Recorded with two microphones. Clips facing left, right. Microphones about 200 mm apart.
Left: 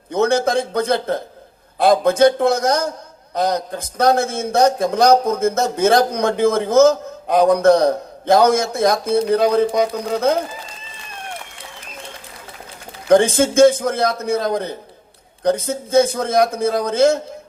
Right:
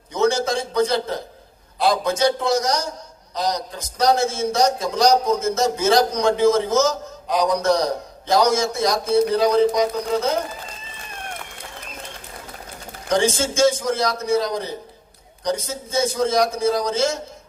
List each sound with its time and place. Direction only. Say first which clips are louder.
0.1 s a sound: left 3 dB; 55° left (ahead or behind)
1.8 s a man's voice: left 6 dB; 55° left (ahead or behind)
13.1 s a man's voice: left 7 dB; 55° left (ahead or behind)